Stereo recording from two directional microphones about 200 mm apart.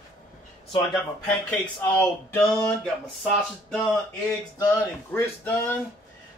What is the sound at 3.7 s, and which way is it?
Speech, centre (ahead or behind).